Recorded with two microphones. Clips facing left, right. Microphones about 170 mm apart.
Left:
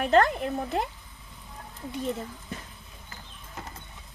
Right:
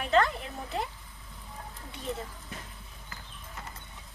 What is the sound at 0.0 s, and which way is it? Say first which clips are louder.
Speech: left 4 dB; 50° left (ahead or behind).